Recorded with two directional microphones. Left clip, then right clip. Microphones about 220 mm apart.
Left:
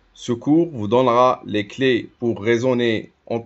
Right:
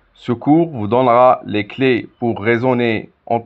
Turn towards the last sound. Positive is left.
turn(degrees=-15)  # may be behind; listen again after turning